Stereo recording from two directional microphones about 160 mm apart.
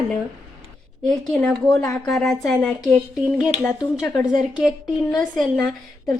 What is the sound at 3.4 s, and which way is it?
Speech, 20° left (ahead or behind).